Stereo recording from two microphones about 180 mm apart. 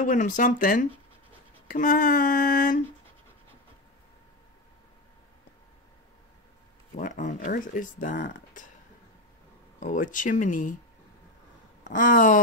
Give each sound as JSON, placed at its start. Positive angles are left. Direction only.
{"t": 0.0, "sound": "speech", "side_deg": 45}
{"t": 7.0, "sound": "speech", "side_deg": 45}
{"t": 9.8, "sound": "speech", "side_deg": 45}
{"t": 11.8, "sound": "speech", "side_deg": 45}